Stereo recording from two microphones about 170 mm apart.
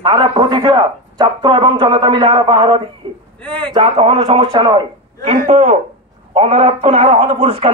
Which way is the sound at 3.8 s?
35° right (ahead or behind).